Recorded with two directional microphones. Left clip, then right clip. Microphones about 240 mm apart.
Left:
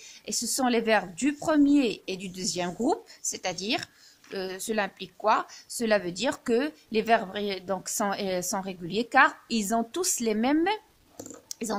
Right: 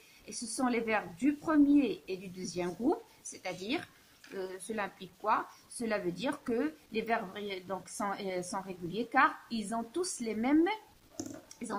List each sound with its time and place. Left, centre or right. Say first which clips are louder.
0.2 s a woman's voice: left 7 dB; left